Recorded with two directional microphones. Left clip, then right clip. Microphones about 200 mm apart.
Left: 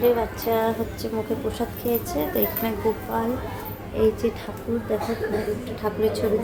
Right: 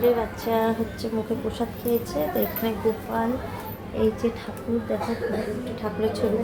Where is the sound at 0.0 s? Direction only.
10° left (ahead or behind).